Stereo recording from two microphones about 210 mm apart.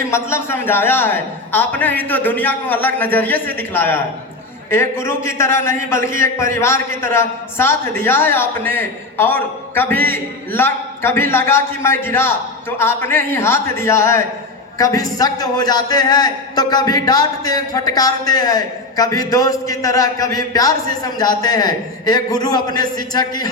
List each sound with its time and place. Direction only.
0.0 s a man's voice: 10° left (ahead or behind)